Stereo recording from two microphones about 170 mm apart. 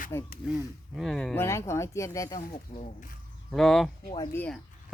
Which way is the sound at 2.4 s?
40° left (ahead or behind).